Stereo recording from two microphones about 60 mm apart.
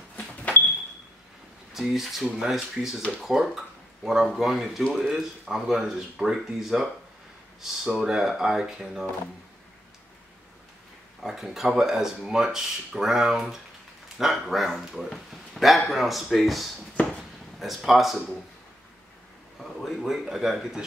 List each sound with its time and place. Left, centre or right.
0.1 s a sound: left
1.7 s speech: centre
11.2 s speech: centre
19.6 s speech: centre